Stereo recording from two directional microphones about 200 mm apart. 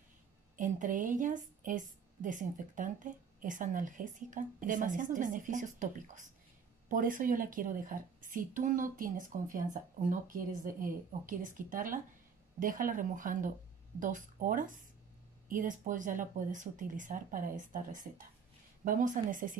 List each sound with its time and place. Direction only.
0.6 s a woman's voice: 40° right (ahead or behind)